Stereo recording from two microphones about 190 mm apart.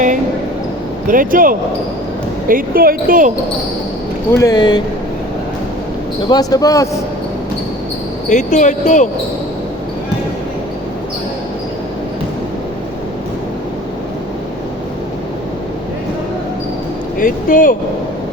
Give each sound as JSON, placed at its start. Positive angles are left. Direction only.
{"t": 1.0, "sound": "speech", "side_deg": -45}
{"t": 4.3, "sound": "speech", "side_deg": 15}
{"t": 6.2, "sound": "speech", "side_deg": 20}
{"t": 8.3, "sound": "speech", "side_deg": 40}
{"t": 17.2, "sound": "speech", "side_deg": 45}